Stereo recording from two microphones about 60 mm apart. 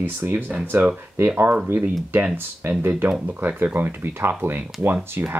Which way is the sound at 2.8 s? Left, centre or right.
Right.